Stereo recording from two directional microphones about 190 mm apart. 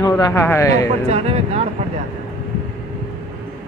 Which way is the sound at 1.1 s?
30° right (ahead or behind).